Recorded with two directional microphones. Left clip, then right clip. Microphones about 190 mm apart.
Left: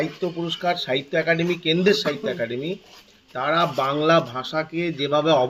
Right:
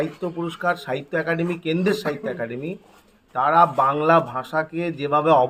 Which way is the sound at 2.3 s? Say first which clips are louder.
Left 2 dB; 20° right (ahead or behind).